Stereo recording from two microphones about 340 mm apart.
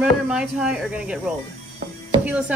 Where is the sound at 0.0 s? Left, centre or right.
Centre.